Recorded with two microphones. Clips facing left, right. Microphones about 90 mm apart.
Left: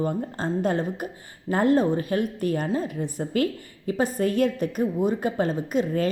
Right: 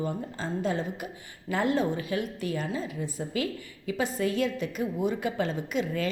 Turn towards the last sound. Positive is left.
turn(degrees=45)  # may be behind; listen again after turning